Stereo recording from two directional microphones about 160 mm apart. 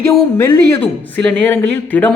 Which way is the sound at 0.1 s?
20° left (ahead or behind).